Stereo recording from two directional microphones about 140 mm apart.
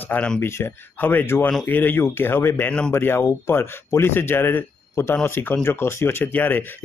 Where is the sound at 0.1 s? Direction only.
10° left (ahead or behind).